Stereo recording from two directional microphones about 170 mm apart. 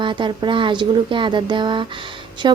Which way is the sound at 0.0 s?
30° right (ahead or behind).